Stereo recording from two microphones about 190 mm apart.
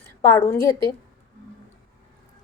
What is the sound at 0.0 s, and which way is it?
Speech, 10° left (ahead or behind).